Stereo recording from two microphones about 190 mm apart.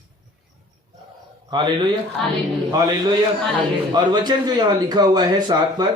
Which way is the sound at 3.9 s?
20° right (ahead or behind).